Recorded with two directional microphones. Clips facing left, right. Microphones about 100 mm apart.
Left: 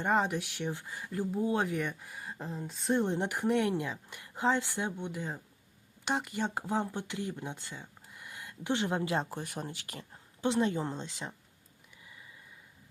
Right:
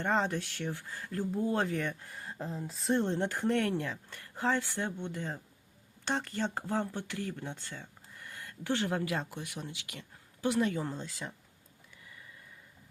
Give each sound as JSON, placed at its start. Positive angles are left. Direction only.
{"t": 0.0, "sound": "speech", "side_deg": 10}
{"t": 3.0, "sound": "speech", "side_deg": 15}